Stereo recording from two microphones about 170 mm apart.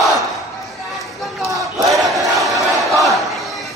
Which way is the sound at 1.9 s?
Centre (ahead or behind).